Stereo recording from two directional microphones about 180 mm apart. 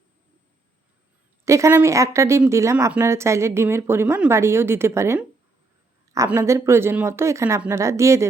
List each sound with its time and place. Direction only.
1.5 s speech: 15° right (ahead or behind)